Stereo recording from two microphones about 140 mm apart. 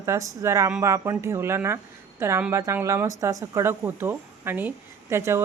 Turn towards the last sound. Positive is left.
turn(degrees=-15)  # may be behind; listen again after turning